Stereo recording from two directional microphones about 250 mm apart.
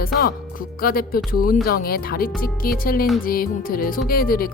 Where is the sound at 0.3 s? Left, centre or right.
Left.